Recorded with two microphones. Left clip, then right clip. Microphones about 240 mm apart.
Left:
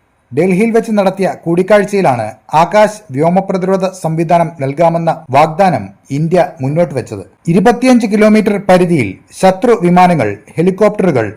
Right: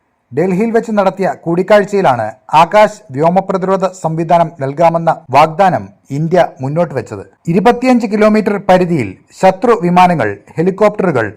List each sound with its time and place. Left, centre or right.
0.3 s a man's voice: centre